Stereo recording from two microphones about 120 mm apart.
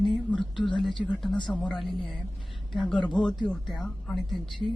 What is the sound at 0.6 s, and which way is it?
Speech, 40° left (ahead or behind).